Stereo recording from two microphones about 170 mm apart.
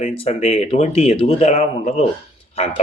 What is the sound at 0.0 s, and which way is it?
Speech, 40° left (ahead or behind).